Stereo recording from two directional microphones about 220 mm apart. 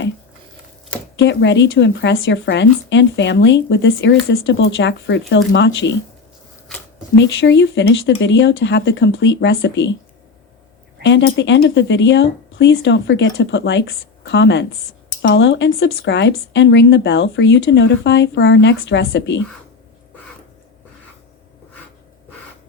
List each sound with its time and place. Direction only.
1.1 s speech: 55° left (ahead or behind)
7.2 s speech: 55° left (ahead or behind)
11.0 s speech: 55° left (ahead or behind)